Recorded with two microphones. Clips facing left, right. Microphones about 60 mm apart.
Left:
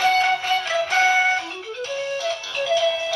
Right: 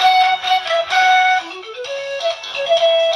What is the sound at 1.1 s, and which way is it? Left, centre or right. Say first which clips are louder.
Music: right 7 dB; right.